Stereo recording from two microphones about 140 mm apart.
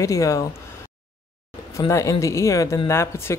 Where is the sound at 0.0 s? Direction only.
25° left (ahead or behind).